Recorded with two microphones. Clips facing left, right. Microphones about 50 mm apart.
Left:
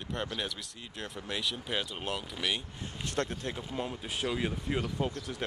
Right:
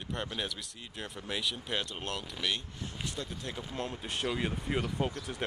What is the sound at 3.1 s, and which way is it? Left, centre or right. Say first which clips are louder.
Speech: left 11 dB; left.